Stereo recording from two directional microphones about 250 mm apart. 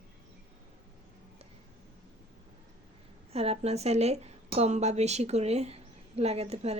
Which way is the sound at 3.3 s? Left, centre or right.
Right.